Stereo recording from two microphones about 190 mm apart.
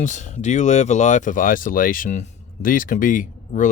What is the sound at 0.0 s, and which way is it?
Speech, 40° left (ahead or behind).